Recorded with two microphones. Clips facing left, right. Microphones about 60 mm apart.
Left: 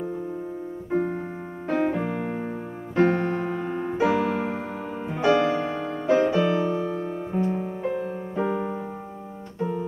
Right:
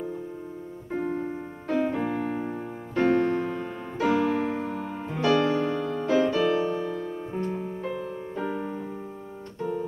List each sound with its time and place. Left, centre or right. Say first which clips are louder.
0.9 s music: left 3 dB; centre
2.0 s music: even; centre
3.0 s music: left 1 dB; left
6.9 s music: left 3 dB; left
7.3 s music: left 5 dB; centre